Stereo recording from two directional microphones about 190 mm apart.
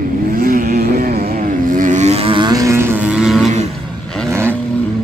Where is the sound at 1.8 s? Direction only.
40° right (ahead or behind); by 3.5 s centre (ahead or behind).